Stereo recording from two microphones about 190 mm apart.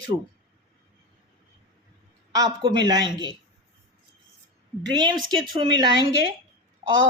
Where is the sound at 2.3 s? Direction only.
20° right (ahead or behind).